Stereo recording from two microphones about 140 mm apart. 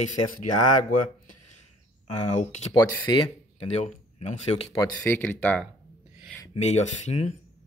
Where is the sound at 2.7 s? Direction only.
30° left (ahead or behind); by 4.7 s 50° left (ahead or behind).